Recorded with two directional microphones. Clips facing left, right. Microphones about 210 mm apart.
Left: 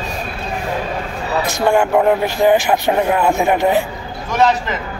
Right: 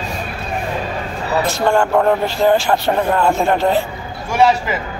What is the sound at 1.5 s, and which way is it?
Speech, 15° left (ahead or behind).